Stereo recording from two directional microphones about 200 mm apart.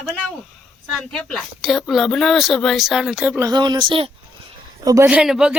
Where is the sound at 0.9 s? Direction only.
Centre (ahead or behind).